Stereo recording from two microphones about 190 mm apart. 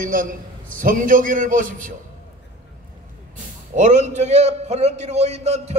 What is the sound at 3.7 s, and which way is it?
A man's voice, 40° right (ahead or behind).